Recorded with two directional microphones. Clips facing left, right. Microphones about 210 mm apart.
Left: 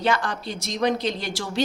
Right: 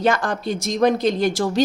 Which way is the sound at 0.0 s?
45° right (ahead or behind).